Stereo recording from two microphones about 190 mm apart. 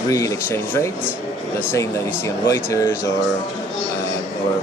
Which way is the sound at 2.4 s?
15° left (ahead or behind).